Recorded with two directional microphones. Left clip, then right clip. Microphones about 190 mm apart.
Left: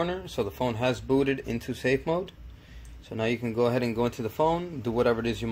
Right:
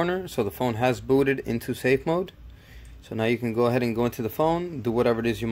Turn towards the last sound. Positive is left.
turn(degrees=-25)  # may be behind; listen again after turning